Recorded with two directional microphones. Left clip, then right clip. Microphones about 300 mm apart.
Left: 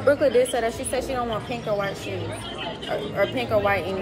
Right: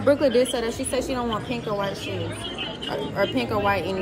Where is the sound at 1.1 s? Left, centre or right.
Centre.